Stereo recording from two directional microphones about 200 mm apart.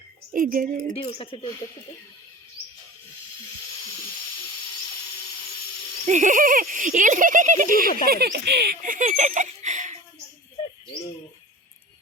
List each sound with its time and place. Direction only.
0.3 s speech: 45° right (ahead or behind)
1.0 s speech: 25° left (ahead or behind)
6.1 s speech: 40° right (ahead or behind)